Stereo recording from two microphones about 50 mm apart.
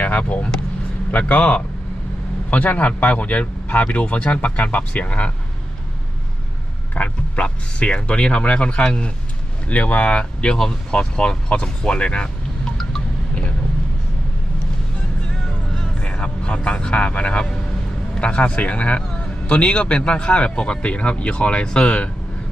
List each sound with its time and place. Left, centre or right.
0.0 s speech: left
6.9 s speech: left
16.0 s vehicle: left
16.2 s speech: left